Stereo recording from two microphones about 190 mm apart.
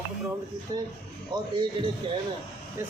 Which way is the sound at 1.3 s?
25° right (ahead or behind).